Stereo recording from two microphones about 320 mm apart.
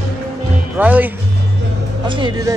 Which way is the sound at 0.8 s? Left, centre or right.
Centre.